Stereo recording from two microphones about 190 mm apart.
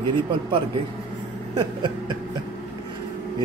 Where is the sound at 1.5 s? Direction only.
25° right (ahead or behind).